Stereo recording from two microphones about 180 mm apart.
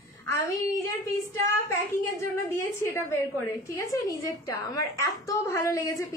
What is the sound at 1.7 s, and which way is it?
A woman's voice, 15° left (ahead or behind).